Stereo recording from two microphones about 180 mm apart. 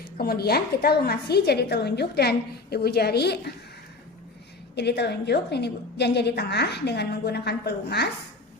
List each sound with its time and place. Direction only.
0.0 s a woman's voice: 60° left (ahead or behind)
4.7 s a woman's voice: 70° left (ahead or behind)